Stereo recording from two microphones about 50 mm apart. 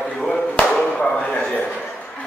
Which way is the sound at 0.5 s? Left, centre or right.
Centre.